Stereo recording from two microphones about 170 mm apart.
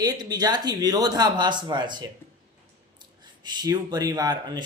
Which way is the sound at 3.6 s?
20° right (ahead or behind).